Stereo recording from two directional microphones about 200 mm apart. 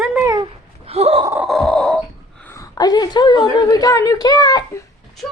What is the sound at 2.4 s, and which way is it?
A woman's voice, 15° left (ahead or behind).